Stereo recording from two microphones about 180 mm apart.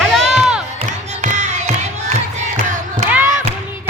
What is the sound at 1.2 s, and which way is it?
Music, 40° right (ahead or behind).